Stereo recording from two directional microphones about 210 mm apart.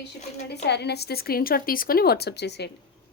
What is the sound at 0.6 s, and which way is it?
A woman's voice, 55° left (ahead or behind).